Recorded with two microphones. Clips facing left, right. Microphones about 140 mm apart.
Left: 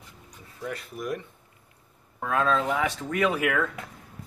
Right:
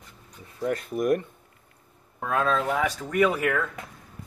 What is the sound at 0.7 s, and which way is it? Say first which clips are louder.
Speech: right 8 dB; 50° right (ahead or behind).